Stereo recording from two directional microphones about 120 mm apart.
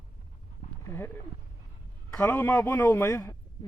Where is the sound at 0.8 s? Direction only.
20° left (ahead or behind).